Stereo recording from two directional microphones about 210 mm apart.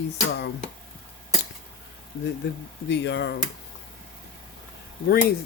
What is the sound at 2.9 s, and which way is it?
Speech, 55° left (ahead or behind).